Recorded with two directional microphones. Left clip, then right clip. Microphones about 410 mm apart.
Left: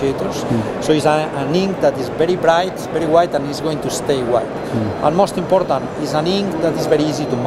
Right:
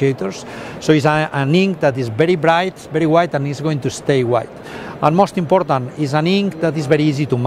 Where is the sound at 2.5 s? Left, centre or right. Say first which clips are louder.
Left 1 dB; right.